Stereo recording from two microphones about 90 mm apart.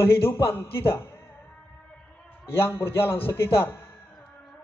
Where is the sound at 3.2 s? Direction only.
25° left (ahead or behind).